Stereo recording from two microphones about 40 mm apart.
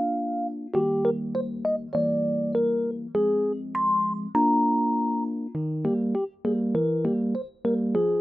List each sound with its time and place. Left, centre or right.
0.7 s electric piano: centre
2.2 s electric piano: right
2.6 s keyboard: left
3.2 s keyboard: right
3.8 s keyboard: left
4.5 s music: left
5.9 s electric piano: centre